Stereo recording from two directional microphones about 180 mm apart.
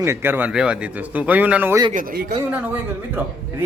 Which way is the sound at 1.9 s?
55° right (ahead or behind).